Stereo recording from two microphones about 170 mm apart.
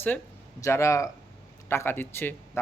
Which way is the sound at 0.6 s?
15° left (ahead or behind).